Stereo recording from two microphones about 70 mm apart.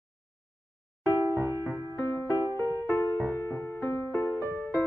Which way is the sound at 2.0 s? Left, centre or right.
Left.